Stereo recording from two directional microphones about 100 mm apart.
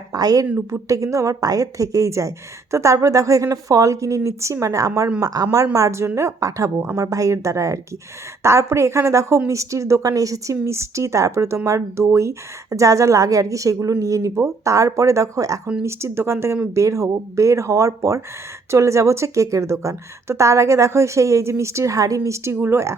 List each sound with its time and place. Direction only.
0.1 s a woman's voice: 40° right (ahead or behind)